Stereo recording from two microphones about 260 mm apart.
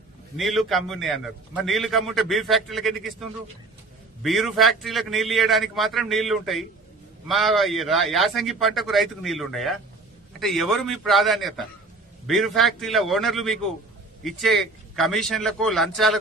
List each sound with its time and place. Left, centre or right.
0.3 s a man's voice: centre